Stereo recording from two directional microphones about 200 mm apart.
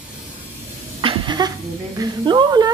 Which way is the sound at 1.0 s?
20° right (ahead or behind).